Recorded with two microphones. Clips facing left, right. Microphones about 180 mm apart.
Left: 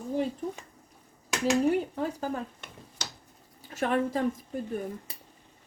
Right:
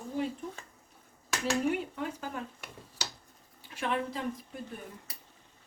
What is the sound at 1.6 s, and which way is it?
Speech, 40° left (ahead or behind).